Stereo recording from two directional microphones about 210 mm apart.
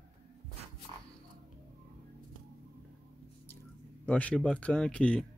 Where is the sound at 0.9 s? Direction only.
25° right (ahead or behind).